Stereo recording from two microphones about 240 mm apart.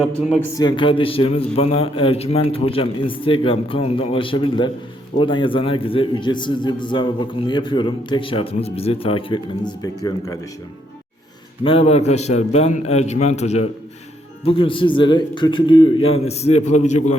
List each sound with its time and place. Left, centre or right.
0.5 s a man's voice: centre
11.6 s a man's voice: left